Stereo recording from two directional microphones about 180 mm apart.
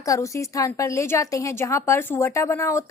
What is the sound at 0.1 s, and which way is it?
A woman's voice, 15° left (ahead or behind).